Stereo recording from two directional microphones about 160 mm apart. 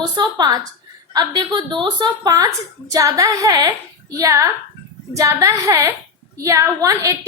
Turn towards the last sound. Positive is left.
turn(degrees=-20)  # may be behind; listen again after turning